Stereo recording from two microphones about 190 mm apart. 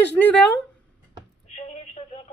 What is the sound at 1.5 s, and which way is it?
Telephone, 35° left (ahead or behind).